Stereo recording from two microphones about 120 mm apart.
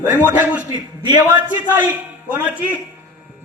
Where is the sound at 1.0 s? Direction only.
35° right (ahead or behind).